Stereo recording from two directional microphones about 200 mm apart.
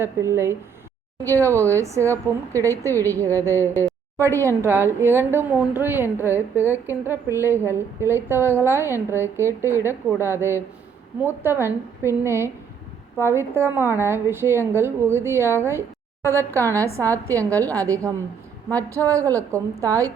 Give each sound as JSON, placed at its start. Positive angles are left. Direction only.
{"t": 0.0, "sound": "speech", "side_deg": -15}
{"t": 17.3, "sound": "speech", "side_deg": -15}